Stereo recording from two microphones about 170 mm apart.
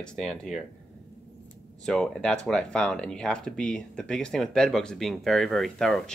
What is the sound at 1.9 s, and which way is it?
Speech, 5° left (ahead or behind).